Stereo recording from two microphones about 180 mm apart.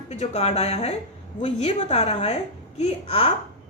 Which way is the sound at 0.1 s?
35° left (ahead or behind).